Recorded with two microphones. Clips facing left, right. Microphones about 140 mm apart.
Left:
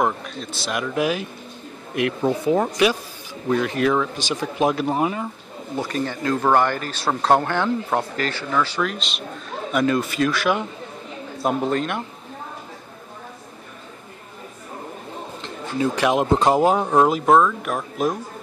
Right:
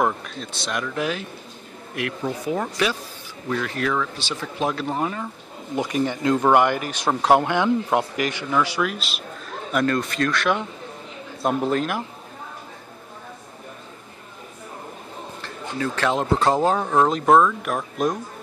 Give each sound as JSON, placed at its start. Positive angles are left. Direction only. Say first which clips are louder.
{"t": 0.0, "sound": "speech", "louder": "left 1 dB", "side_deg": 0}
{"t": 2.2, "sound": "speech", "louder": "left 6 dB", "side_deg": 30}
{"t": 5.8, "sound": "speech", "louder": "right 2 dB", "side_deg": -15}
{"t": 15.8, "sound": "speech", "louder": "left 4 dB", "side_deg": 15}
{"t": 17.3, "sound": "speech", "louder": "even", "side_deg": 0}